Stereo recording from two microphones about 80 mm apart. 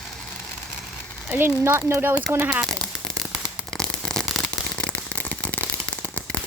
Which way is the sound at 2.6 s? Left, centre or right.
Centre.